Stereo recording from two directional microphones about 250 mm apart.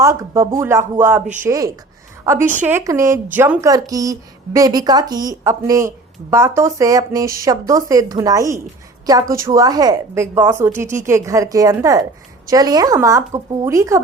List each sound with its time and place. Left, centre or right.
0.0 s a woman's voice: centre